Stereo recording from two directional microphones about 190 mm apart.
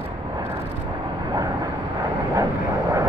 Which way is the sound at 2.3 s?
20° right (ahead or behind).